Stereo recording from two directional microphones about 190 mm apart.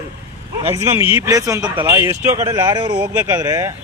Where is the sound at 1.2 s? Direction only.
15° right (ahead or behind).